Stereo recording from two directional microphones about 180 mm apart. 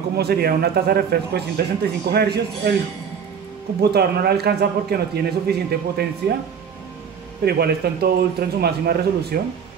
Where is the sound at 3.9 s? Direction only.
60° right (ahead or behind).